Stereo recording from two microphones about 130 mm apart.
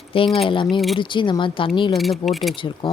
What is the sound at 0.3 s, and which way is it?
Speech, 40° left (ahead or behind).